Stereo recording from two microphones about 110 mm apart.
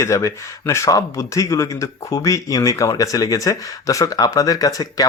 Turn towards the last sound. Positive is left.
turn(degrees=30)  # may be behind; listen again after turning